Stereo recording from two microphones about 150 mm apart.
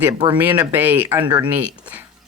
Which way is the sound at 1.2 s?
30° right (ahead or behind).